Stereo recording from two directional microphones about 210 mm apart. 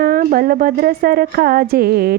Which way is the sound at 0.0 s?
40° right (ahead or behind).